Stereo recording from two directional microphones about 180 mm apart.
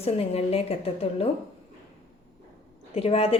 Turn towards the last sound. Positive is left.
turn(degrees=30)  # may be behind; listen again after turning